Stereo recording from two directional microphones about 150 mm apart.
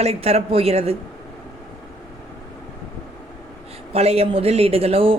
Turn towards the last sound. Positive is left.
turn(degrees=-40)  # may be behind; listen again after turning